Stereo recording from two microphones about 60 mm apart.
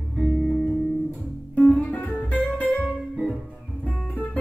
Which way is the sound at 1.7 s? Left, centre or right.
Left.